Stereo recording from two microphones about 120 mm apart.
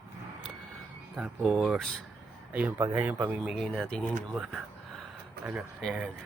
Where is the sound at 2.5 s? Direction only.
15° right (ahead or behind).